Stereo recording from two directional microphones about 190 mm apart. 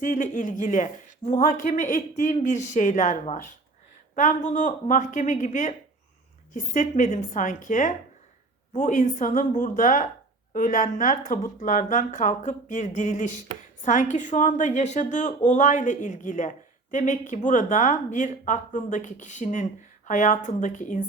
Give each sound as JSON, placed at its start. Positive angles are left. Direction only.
{"t": 0.0, "sound": "a woman's voice", "side_deg": 45}